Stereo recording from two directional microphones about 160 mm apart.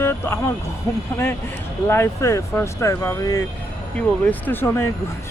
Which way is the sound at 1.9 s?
15° left (ahead or behind).